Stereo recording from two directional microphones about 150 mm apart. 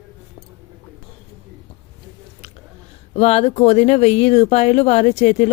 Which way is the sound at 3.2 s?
45° left (ahead or behind).